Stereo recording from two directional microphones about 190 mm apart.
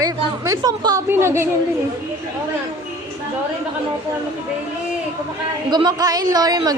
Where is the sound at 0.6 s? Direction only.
20° right (ahead or behind).